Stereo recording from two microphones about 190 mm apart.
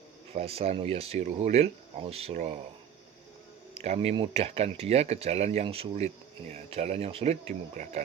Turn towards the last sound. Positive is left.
turn(degrees=-40)  # may be behind; listen again after turning